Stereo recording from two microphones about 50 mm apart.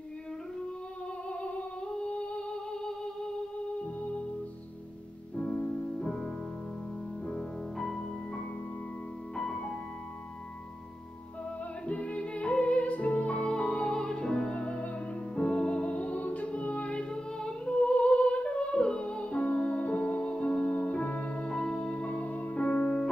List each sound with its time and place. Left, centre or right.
1.3 s music: left
5.3 s music: left; by 8.5 s centre
9.5 s music: centre
11.9 s music: left